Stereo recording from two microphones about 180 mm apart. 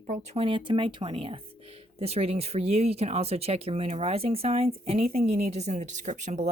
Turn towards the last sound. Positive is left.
turn(degrees=-40)  # may be behind; listen again after turning